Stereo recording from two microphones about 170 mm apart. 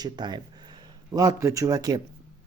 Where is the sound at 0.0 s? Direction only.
25° right (ahead or behind).